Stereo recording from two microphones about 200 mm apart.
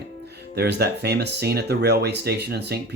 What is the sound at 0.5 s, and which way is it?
Speech, 55° right (ahead or behind).